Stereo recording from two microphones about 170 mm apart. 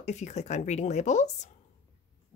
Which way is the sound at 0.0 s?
45° left (ahead or behind).